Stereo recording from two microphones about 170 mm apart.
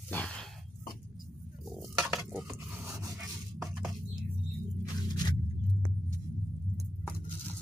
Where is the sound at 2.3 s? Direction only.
15° right (ahead or behind).